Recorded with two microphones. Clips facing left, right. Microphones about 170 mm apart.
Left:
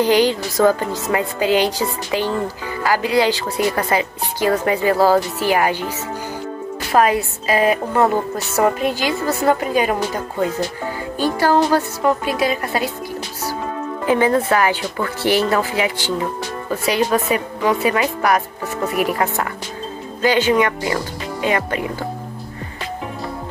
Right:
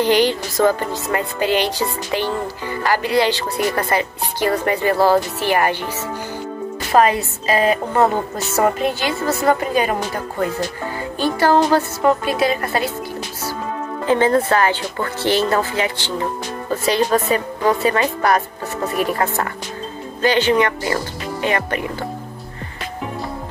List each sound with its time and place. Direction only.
0.0 s a woman's voice: 10° left (ahead or behind)
6.9 s a woman's voice: 5° left (ahead or behind)
11.1 s a woman's voice: 15° left (ahead or behind)
14.0 s a woman's voice: 15° left (ahead or behind)